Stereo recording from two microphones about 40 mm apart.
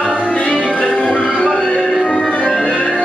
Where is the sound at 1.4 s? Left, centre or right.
Centre.